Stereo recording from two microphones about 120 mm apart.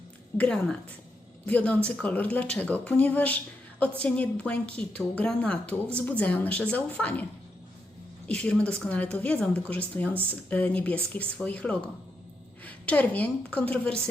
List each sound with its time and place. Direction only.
0.3 s a woman's voice: 10° left (ahead or behind)
8.3 s a woman's voice: 10° left (ahead or behind)